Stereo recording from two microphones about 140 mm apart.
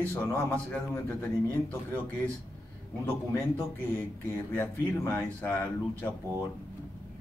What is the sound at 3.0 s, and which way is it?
A man's voice, 15° left (ahead or behind).